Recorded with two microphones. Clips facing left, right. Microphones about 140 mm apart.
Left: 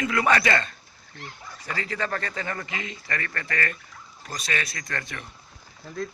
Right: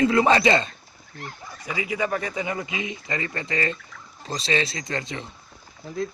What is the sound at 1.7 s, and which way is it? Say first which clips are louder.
Speech: right 4 dB; 10° right (ahead or behind).